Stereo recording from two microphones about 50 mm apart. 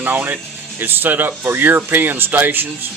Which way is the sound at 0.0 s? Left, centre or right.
Right.